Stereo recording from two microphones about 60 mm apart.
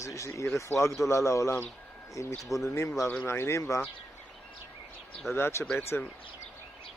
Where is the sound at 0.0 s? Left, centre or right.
Left.